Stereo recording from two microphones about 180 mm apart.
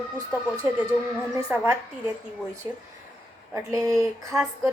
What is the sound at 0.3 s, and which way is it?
Speech, 10° right (ahead or behind).